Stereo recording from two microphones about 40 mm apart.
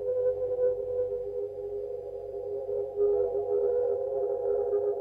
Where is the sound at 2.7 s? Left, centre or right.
Centre.